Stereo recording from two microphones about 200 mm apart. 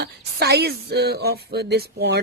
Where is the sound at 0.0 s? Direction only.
55° right (ahead or behind).